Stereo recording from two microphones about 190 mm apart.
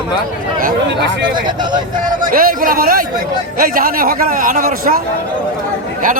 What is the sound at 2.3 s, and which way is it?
A man's voice, 50° right (ahead or behind).